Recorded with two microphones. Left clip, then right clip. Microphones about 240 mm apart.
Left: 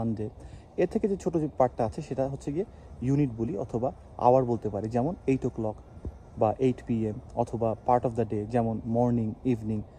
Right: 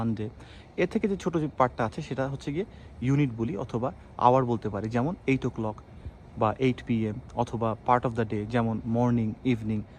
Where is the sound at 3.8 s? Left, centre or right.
Centre.